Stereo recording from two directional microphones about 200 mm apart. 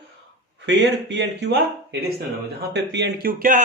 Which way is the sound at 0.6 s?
60° right (ahead or behind).